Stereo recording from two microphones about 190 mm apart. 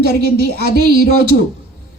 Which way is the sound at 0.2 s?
55° right (ahead or behind).